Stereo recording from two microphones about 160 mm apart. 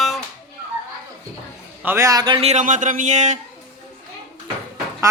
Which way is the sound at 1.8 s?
15° right (ahead or behind).